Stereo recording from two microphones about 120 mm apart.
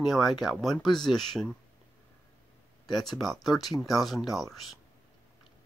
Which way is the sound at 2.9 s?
Centre (ahead or behind).